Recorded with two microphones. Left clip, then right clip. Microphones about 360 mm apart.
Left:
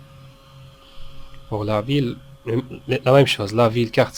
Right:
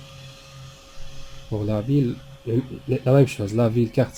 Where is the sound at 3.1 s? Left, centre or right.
Left.